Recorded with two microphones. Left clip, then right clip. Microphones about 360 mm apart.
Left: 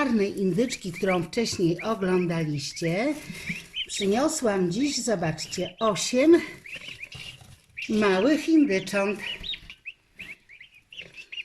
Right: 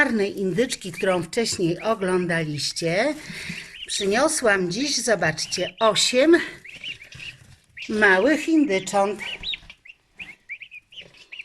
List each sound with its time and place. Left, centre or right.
0.0 s speech: right
7.9 s speech: right